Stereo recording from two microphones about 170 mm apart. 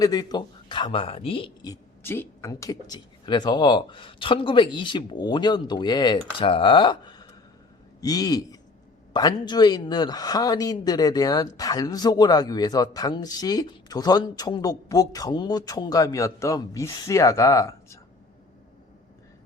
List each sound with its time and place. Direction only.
0.0 s speech: 25° left (ahead or behind)